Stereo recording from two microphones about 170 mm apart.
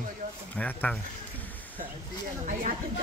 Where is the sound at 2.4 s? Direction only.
50° right (ahead or behind).